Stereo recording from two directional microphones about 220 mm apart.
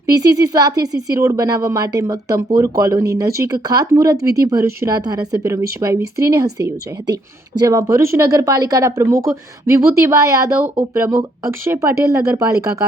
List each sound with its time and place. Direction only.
0.1 s speech: 15° right (ahead or behind)
7.6 s speech: 15° right (ahead or behind)